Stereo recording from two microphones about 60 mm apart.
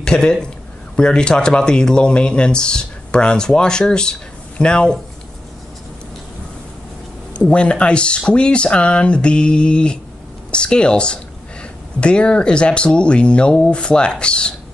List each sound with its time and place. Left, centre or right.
0.0 s speech: centre
7.3 s speech: centre